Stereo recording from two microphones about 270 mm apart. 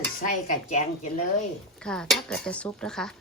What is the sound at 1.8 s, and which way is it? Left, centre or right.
A woman's voice, centre.